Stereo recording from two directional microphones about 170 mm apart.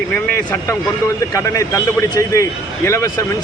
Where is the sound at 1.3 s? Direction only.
20° left (ahead or behind).